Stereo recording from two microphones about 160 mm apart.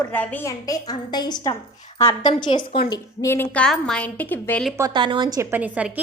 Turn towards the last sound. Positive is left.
turn(degrees=-10)  # may be behind; listen again after turning